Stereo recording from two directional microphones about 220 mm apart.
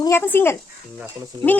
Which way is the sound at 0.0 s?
10° left (ahead or behind).